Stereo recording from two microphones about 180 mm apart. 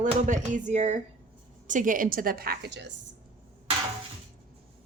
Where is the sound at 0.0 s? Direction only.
45° right (ahead or behind); by 2.9 s 70° right (ahead or behind).